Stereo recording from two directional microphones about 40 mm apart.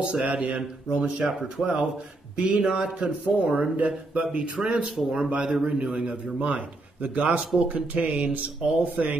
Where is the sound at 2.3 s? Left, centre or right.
Right.